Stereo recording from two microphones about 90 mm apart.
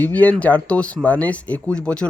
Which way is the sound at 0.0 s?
15° left (ahead or behind).